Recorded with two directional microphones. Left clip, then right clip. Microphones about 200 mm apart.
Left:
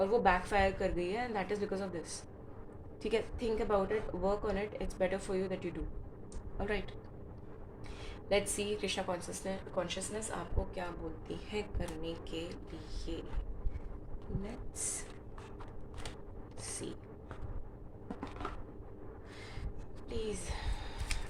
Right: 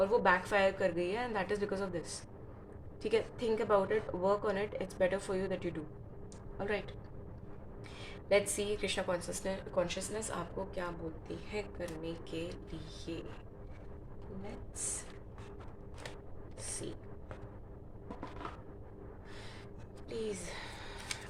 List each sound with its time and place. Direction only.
0.0 s a woman's voice: 15° right (ahead or behind)
8.0 s a woman's voice: 15° right (ahead or behind)
11.3 s a woman's voice: 5° right (ahead or behind)
20.1 s a woman's voice: 15° right (ahead or behind)